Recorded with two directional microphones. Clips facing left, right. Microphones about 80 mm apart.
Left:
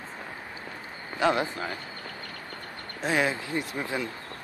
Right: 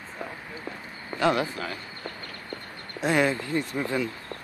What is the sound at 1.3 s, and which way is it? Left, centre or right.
Speech, left.